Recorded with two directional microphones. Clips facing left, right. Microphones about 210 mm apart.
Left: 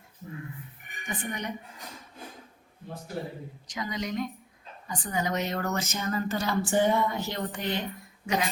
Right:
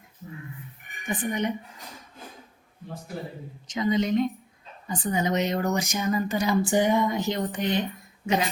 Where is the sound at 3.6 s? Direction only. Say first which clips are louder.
Right 10 dB; 25° right (ahead or behind).